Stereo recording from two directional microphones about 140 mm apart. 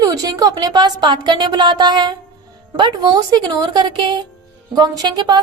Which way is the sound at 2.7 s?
30° right (ahead or behind).